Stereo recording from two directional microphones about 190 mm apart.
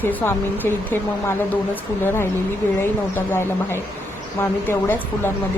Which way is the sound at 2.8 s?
10° left (ahead or behind).